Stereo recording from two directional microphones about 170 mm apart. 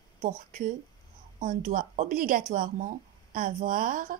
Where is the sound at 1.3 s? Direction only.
50° right (ahead or behind).